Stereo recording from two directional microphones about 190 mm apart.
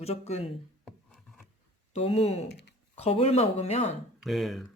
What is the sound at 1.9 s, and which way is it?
Speech, 35° left (ahead or behind).